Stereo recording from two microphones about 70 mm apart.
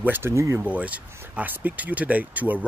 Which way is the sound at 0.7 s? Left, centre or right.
Right.